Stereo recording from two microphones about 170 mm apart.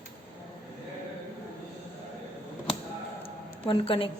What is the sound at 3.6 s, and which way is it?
Speech, 30° left (ahead or behind).